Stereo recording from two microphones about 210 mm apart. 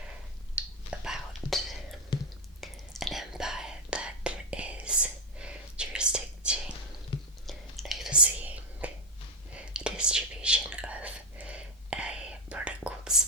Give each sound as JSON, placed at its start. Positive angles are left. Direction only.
{"t": 0.5, "sound": "whispering", "side_deg": -5}
{"t": 2.1, "sound": "whispering", "side_deg": 20}
{"t": 2.6, "sound": "whispering", "side_deg": 0}